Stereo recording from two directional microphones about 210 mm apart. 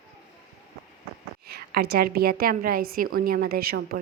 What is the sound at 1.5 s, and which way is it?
A woman's voice, 45° right (ahead or behind).